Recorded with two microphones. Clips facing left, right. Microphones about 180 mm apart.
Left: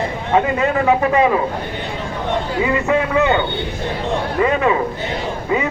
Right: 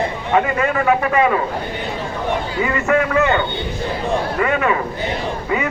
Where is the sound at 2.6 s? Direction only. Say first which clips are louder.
Right 1 dB; 20° left (ahead or behind).